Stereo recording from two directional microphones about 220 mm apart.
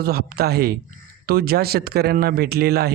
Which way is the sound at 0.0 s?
45° right (ahead or behind).